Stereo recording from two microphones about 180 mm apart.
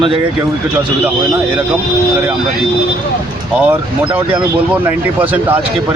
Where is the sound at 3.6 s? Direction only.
10° right (ahead or behind).